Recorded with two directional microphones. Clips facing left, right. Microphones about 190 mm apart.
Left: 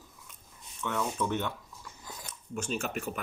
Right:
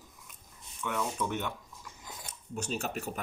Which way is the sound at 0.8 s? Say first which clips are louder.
Left 2 dB; 10° right (ahead or behind).